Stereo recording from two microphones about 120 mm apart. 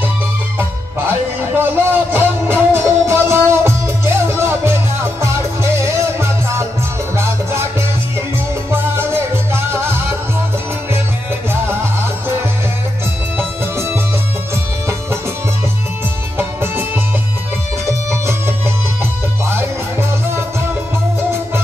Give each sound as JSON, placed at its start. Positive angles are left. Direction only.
{"t": 1.6, "sound": "music", "side_deg": -15}
{"t": 8.6, "sound": "music", "side_deg": -20}
{"t": 13.4, "sound": "music", "side_deg": -20}
{"t": 16.3, "sound": "music", "side_deg": -20}
{"t": 19.4, "sound": "music", "side_deg": -20}